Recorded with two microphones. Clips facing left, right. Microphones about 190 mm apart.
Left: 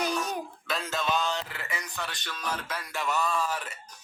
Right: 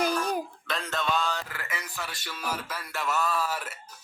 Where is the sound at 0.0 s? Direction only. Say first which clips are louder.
Right 3 dB; 5° right (ahead or behind).